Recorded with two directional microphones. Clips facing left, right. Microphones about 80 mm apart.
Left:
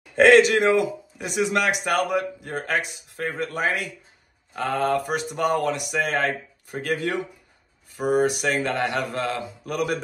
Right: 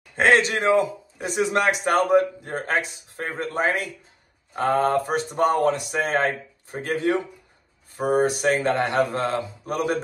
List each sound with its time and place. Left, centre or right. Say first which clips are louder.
0.2 s speech: left 4 dB; right